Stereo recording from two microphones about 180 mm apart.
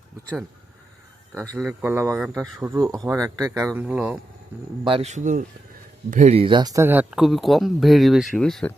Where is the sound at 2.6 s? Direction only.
15° right (ahead or behind).